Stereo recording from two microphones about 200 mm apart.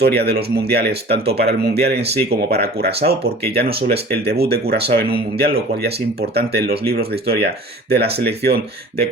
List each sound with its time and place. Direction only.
0.0 s speech: 55° right (ahead or behind)